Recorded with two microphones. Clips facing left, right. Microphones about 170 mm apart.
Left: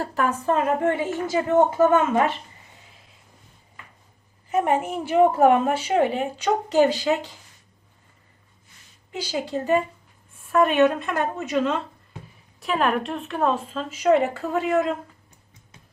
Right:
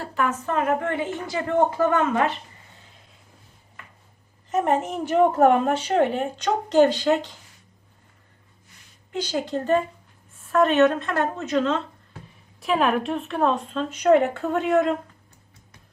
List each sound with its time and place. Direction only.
0.0 s a woman's voice: 40° left (ahead or behind); by 2.3 s 25° left (ahead or behind)
4.4 s a woman's voice: 10° left (ahead or behind)
9.1 s a woman's voice: 10° left (ahead or behind)
12.5 s a woman's voice: centre (ahead or behind)